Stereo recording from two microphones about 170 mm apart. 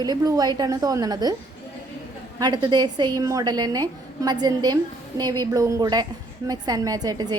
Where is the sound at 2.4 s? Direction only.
25° right (ahead or behind).